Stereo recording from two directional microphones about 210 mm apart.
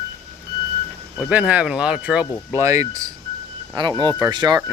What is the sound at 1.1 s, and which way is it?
Speech, 5° right (ahead or behind).